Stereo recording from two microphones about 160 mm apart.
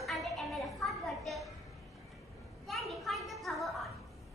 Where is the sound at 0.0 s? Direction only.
Centre (ahead or behind).